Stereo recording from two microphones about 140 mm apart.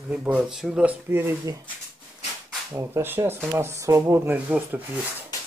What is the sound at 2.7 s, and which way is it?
Speech, 15° right (ahead or behind).